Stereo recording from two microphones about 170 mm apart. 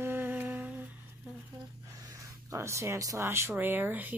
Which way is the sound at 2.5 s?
15° right (ahead or behind).